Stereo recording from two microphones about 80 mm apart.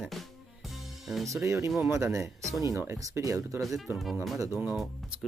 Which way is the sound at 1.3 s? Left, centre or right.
Right.